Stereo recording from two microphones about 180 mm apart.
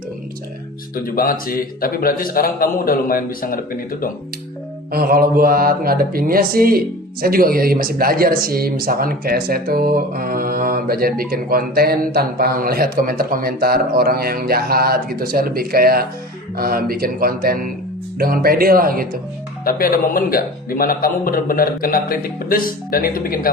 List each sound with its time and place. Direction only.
1.0 s a man's voice: 55° left (ahead or behind)
4.9 s mantra: 55° right (ahead or behind)
18.2 s speech: 55° right (ahead or behind)
19.6 s a man's voice: 55° left (ahead or behind)